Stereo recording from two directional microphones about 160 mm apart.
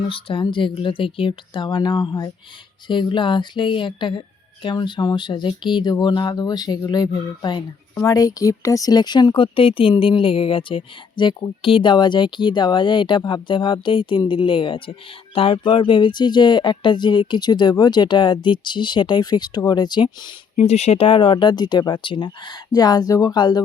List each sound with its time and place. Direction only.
0.1 s speech: 35° left (ahead or behind)
20.6 s speech: 40° left (ahead or behind)